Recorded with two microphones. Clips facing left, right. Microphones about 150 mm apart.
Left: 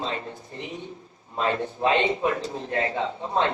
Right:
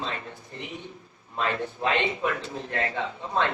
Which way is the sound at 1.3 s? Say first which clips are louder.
Left 3 dB; 25° left (ahead or behind).